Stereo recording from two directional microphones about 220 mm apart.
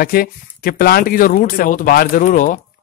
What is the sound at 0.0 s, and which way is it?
Speech, 40° left (ahead or behind).